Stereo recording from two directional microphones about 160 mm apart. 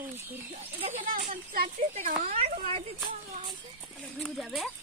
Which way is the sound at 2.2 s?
40° right (ahead or behind).